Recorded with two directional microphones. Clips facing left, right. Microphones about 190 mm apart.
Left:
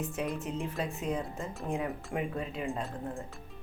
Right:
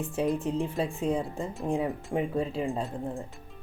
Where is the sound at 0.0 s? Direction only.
30° right (ahead or behind).